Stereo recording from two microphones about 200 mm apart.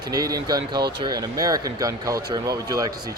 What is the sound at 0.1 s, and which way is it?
Speech, 20° right (ahead or behind).